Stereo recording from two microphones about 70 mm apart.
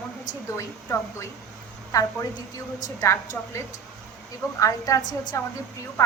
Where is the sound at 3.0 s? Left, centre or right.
Left.